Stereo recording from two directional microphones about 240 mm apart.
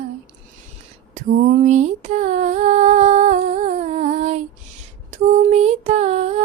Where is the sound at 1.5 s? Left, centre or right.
Right.